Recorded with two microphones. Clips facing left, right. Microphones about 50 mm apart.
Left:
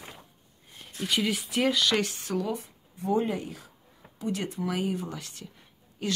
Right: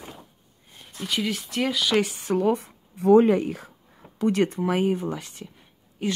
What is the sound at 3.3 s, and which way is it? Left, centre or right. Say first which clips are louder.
Speech: right 10 dB; right.